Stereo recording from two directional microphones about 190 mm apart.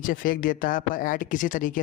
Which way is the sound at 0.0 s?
45° left (ahead or behind).